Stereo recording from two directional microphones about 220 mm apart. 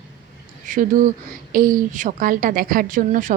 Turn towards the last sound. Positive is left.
turn(degrees=-40)  # may be behind; listen again after turning